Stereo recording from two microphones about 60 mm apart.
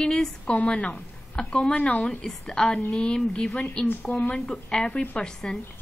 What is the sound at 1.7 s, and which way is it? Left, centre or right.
Speech, left.